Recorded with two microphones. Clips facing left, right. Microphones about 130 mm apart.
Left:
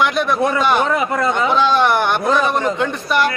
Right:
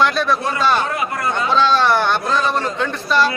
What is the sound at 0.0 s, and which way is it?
A man's voice, 15° left (ahead or behind).